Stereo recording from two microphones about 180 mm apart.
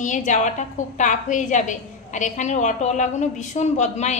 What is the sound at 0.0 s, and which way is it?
A woman's voice, 45° left (ahead or behind).